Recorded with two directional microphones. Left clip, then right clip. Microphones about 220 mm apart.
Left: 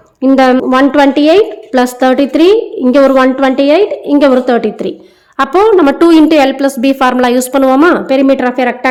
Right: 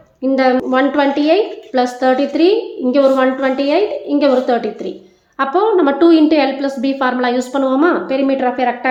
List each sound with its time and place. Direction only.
0.2 s a woman's voice: 50° left (ahead or behind)